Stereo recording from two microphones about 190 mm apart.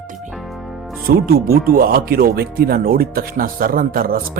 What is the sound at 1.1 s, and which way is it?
Speech, 50° right (ahead or behind).